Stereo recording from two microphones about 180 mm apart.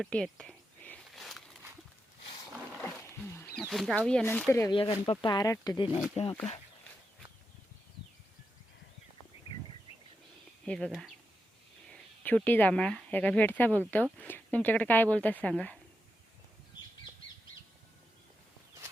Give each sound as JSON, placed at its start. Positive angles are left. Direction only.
{"t": 0.0, "sound": "a sound", "side_deg": 5}
{"t": 3.0, "sound": "wild animals", "side_deg": 10}
{"t": 3.6, "sound": "speech", "side_deg": 0}
{"t": 4.7, "sound": "speech", "side_deg": 30}
{"t": 10.7, "sound": "speech", "side_deg": 5}